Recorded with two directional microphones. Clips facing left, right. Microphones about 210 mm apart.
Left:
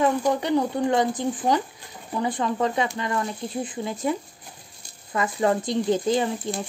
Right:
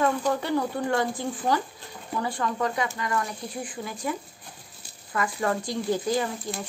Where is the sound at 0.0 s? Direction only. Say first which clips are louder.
Left 3 dB; 20° left (ahead or behind).